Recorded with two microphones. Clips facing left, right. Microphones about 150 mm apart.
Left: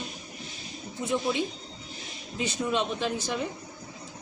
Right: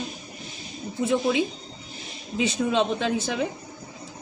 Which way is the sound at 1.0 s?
90° right.